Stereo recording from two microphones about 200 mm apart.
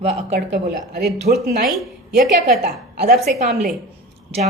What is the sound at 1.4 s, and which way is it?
A woman's voice, 50° right (ahead or behind).